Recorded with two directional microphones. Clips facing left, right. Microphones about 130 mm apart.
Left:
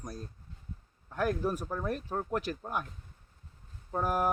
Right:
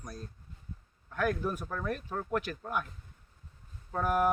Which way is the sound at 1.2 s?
35° left (ahead or behind).